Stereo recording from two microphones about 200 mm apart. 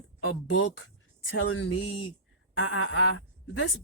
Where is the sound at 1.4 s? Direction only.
70° left (ahead or behind).